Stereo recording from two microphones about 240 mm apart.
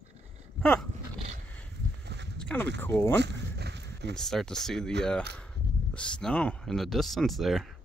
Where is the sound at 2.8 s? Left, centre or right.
Centre.